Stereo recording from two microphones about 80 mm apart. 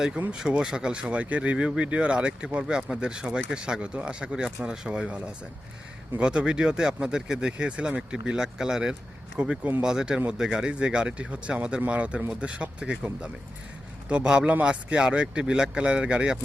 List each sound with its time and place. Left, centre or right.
0.3 s speech: centre